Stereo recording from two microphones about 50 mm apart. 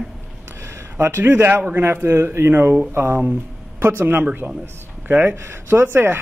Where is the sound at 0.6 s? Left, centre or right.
Right.